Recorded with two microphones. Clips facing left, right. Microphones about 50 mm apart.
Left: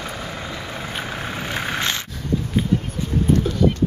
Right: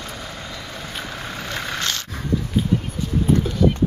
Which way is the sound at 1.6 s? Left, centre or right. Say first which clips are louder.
Left 2 dB; left.